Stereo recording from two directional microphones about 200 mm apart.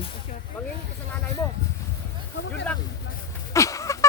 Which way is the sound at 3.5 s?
15° left (ahead or behind).